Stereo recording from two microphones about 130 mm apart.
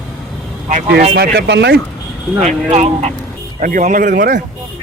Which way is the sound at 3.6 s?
90° right.